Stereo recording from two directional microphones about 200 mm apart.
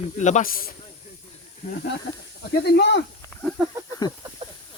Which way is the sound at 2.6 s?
55° left (ahead or behind).